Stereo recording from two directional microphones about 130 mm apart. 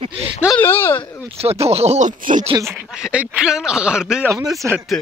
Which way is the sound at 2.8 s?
5° right (ahead or behind).